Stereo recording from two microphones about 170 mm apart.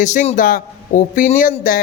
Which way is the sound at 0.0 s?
45° left (ahead or behind).